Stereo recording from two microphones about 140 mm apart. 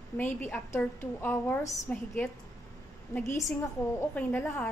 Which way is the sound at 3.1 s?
20° left (ahead or behind).